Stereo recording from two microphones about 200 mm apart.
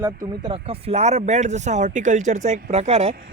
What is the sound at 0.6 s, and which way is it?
Speech, 30° right (ahead or behind).